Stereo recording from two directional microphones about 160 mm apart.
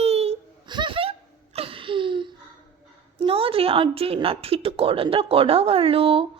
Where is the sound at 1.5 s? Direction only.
35° right (ahead or behind).